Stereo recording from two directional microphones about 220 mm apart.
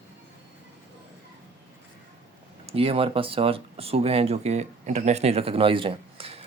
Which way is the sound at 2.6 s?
25° right (ahead or behind).